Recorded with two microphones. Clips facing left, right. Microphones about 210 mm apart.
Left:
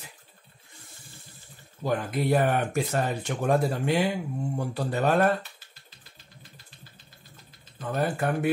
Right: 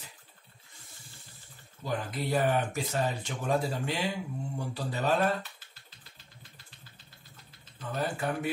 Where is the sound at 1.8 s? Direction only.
55° left (ahead or behind).